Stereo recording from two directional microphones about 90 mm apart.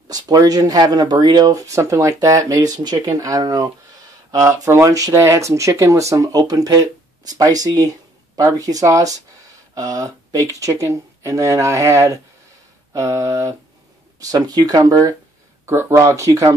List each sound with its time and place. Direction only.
0.1 s speech: 45° right (ahead or behind)
14.2 s speech: 45° right (ahead or behind)